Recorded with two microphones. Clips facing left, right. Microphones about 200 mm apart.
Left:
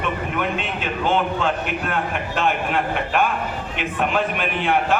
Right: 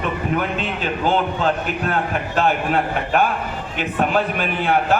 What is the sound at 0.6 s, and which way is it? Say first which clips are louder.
A man's voice: right 2 dB; 40° right (ahead or behind).